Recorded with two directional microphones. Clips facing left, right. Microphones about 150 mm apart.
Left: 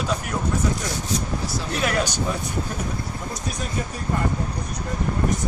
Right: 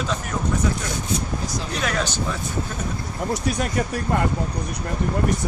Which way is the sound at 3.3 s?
65° right (ahead or behind).